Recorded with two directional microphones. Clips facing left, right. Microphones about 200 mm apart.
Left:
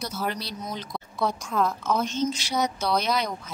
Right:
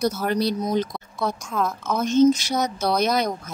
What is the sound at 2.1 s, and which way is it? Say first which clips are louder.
Speech: right 10 dB; 45° right (ahead or behind).